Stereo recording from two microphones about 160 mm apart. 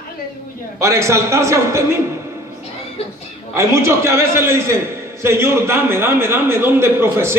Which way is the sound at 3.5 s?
15° right (ahead or behind).